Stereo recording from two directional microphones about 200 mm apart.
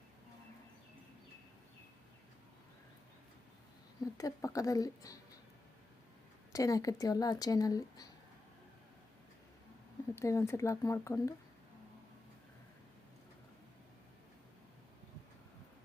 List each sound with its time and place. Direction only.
4.0 s speech: 15° left (ahead or behind)
6.5 s speech: 15° left (ahead or behind)
10.2 s speech: 15° left (ahead or behind)